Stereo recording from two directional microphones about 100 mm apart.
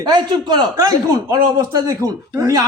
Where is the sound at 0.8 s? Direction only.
35° right (ahead or behind).